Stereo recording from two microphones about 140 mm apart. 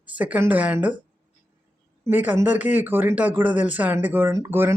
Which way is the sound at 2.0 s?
15° right (ahead or behind).